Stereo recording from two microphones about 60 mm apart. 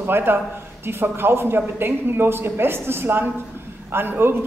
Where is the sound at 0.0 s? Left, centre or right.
Right.